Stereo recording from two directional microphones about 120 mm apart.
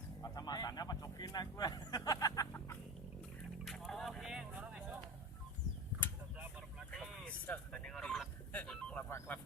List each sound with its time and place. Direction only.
0.2 s a sound: 30° left (ahead or behind)
2.0 s music: 30° left (ahead or behind)
3.6 s music: centre (ahead or behind)
6.3 s a sound: 5° right (ahead or behind)
7.4 s music: 10° left (ahead or behind)
9.0 s music: 20° left (ahead or behind)